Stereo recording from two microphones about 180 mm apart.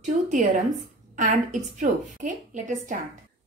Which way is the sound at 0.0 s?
45° right (ahead or behind).